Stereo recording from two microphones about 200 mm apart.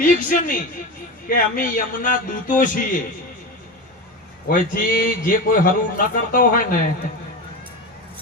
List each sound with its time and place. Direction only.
0.0 s a man's voice: 40° left (ahead or behind)
4.4 s a man's voice: 45° left (ahead or behind)